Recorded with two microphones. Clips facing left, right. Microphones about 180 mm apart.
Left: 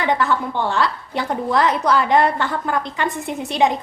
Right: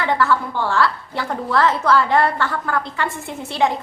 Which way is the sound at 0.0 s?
20° left (ahead or behind).